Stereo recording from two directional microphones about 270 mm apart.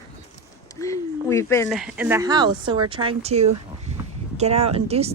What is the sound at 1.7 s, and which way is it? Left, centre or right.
Speech, centre.